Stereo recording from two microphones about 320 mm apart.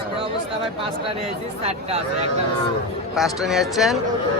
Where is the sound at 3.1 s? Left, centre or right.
Centre.